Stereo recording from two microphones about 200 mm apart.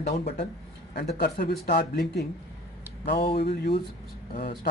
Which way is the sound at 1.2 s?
50° left (ahead or behind).